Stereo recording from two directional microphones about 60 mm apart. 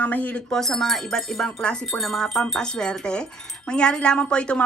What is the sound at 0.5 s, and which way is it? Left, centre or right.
Speech, centre.